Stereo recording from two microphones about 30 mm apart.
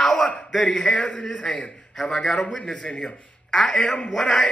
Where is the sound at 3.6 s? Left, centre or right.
Left.